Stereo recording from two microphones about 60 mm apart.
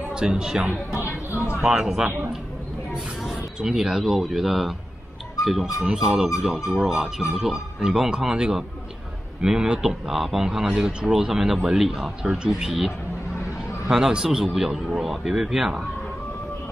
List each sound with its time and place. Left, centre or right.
0.1 s speech: centre
0.9 s speech: left
1.6 s speech: centre